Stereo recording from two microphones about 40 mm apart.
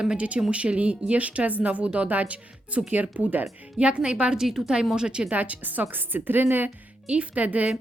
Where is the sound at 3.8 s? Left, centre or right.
Right.